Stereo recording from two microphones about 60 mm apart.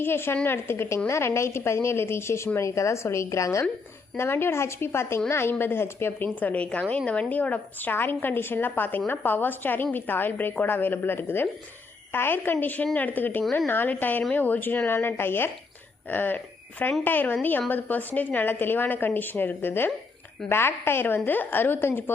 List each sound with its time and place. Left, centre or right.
0.0 s a woman's voice: left
4.2 s a woman's voice: left